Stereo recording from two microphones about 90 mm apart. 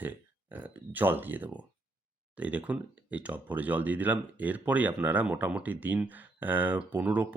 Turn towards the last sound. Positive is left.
turn(degrees=-15)  # may be behind; listen again after turning